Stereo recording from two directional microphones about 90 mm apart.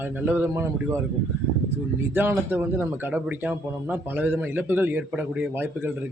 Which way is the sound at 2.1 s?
25° right (ahead or behind).